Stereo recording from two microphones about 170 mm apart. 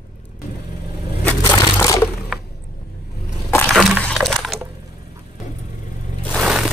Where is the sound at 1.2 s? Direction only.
15° left (ahead or behind).